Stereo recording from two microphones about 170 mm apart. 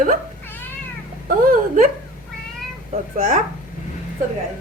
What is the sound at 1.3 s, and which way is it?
Speech, 55° right (ahead or behind).